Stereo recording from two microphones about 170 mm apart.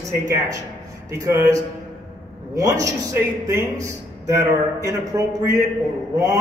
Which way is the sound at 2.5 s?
20° right (ahead or behind).